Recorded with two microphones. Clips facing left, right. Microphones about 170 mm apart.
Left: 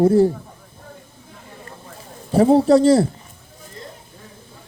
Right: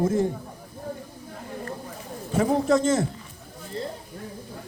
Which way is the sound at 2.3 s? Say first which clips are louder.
Left 8 dB; 35° left (ahead or behind).